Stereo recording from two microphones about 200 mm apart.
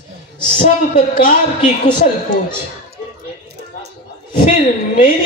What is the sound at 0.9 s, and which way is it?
Speech, 45° left (ahead or behind).